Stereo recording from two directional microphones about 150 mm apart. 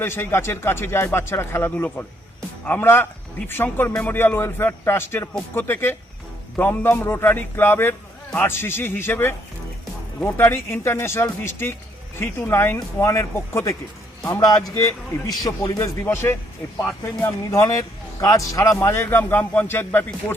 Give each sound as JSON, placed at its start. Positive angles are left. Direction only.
{"t": 0.0, "sound": "a man's voice", "side_deg": 15}